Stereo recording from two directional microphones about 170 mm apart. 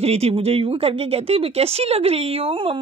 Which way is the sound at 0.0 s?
35° right (ahead or behind).